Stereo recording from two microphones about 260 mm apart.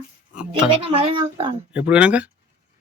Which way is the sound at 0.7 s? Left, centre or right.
Right.